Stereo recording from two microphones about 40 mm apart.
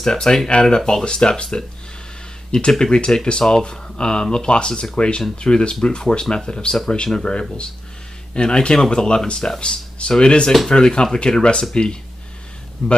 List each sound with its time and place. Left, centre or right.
0.0 s speech: centre
0.5 s speech: left
0.7 s speech: centre
2.8 s speech: left
8.4 s speech: left